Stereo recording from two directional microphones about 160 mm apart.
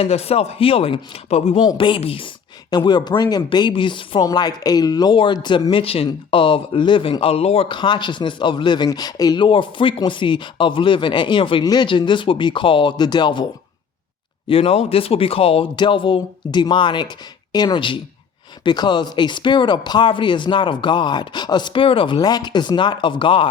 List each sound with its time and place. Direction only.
0.0 s speech: 40° left (ahead or behind)